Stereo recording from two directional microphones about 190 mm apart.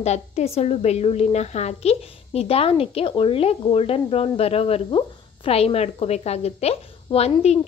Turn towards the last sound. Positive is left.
turn(degrees=35)  # may be behind; listen again after turning